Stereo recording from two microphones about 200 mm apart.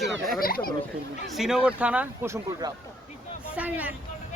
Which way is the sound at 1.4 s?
5° right (ahead or behind).